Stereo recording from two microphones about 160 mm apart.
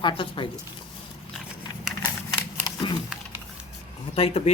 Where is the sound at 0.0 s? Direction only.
30° left (ahead or behind).